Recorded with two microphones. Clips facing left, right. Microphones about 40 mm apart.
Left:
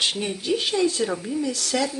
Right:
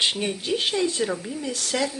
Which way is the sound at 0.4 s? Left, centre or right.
Right.